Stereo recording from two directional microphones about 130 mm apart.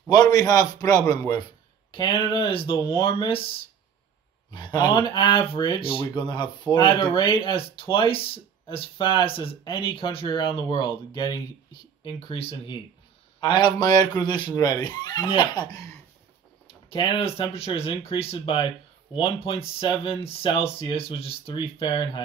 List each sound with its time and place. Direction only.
0.1 s a man's voice: 30° left (ahead or behind)
4.5 s speech: 35° left (ahead or behind)
13.4 s speech: 35° left (ahead or behind)
16.9 s speech: 45° left (ahead or behind)